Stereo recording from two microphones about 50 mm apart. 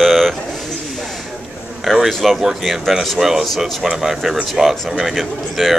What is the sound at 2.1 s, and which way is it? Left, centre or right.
A man's voice, centre.